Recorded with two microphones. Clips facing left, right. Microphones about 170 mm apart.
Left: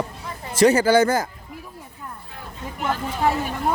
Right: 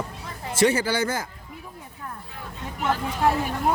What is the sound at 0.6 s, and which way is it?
Speech, 45° left (ahead or behind).